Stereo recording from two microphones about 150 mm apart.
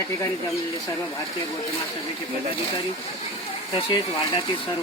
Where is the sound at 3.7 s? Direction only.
35° left (ahead or behind).